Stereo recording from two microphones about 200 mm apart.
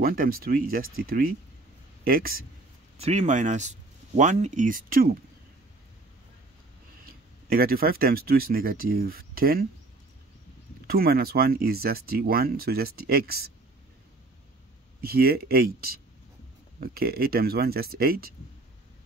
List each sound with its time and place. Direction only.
0.0 s speech: 45° right (ahead or behind)
3.0 s speech: 35° right (ahead or behind)
7.4 s speech: 50° right (ahead or behind)
10.9 s speech: 50° right (ahead or behind)
15.0 s speech: 50° right (ahead or behind)